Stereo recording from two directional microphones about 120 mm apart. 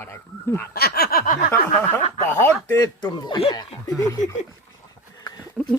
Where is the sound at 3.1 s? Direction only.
35° left (ahead or behind).